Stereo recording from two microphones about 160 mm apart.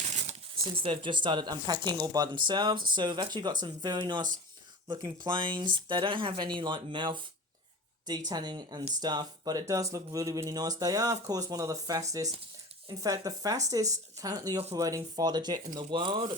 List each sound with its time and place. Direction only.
0.0 s a sound: 45° right (ahead or behind)
0.8 s speech: 30° right (ahead or behind)
8.3 s speech: 25° right (ahead or behind)